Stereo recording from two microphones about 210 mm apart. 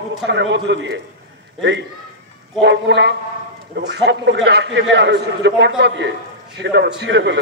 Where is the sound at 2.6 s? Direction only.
55° right (ahead or behind).